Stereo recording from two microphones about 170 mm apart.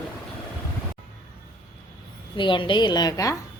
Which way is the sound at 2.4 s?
30° left (ahead or behind).